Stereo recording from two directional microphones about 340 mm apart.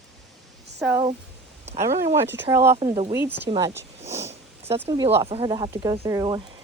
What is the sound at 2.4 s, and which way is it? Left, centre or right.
Speech, centre.